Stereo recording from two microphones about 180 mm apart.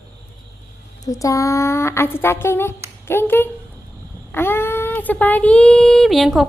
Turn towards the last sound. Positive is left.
turn(degrees=0)  # may be behind; listen again after turning